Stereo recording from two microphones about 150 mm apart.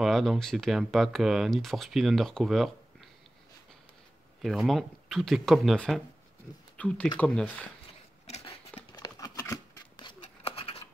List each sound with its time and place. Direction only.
0.0 s speech: centre (ahead or behind)
4.4 s speech: centre (ahead or behind)
8.3 s a sound: 45° left (ahead or behind)
8.9 s scissors: 25° left (ahead or behind)